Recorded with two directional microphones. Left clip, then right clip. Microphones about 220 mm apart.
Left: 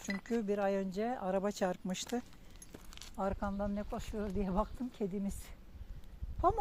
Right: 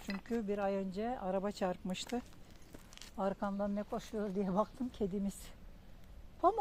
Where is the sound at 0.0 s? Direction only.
20° left (ahead or behind).